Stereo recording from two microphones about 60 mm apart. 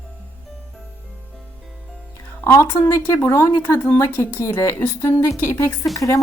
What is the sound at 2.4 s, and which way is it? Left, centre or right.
Speech, left.